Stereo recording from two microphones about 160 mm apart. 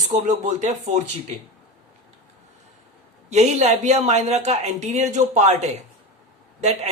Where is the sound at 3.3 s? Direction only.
45° right (ahead or behind).